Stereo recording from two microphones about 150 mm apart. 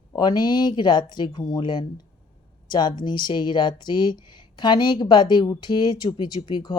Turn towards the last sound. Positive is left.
turn(degrees=30)  # may be behind; listen again after turning